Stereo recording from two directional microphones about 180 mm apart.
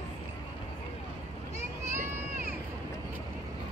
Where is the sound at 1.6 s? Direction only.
15° right (ahead or behind).